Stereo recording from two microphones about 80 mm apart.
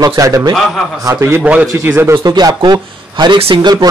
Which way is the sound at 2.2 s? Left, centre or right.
Right.